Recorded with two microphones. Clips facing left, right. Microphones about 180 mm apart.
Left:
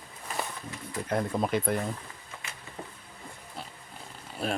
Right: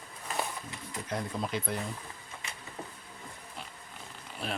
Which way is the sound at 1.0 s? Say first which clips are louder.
Left 6 dB; 55° left (ahead or behind).